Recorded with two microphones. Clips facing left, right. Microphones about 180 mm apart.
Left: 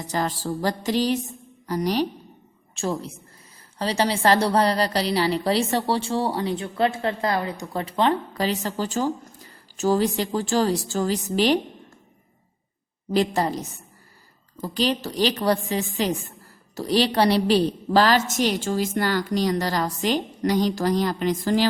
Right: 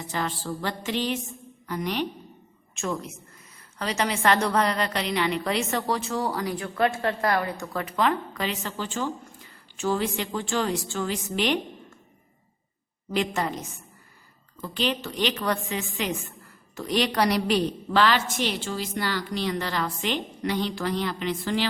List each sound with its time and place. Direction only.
0.1 s a woman's voice: 40° left (ahead or behind); by 7.8 s 20° left (ahead or behind)
7.8 s a woman's voice: 30° left (ahead or behind)
13.1 s a woman's voice: 35° left (ahead or behind)